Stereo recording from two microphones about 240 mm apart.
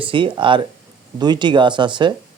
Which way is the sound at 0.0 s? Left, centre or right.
Right.